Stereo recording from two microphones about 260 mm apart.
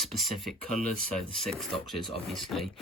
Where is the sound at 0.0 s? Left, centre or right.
Centre.